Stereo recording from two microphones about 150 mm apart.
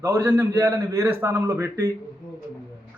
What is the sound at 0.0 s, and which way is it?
A man's voice, 20° right (ahead or behind).